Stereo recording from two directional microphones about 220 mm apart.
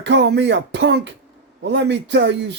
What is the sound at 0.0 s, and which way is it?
Speech, 55° right (ahead or behind).